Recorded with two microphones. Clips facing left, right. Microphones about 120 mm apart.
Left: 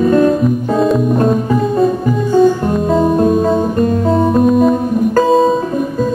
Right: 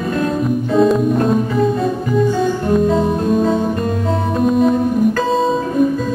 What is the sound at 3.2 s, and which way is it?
Music, 45° left (ahead or behind).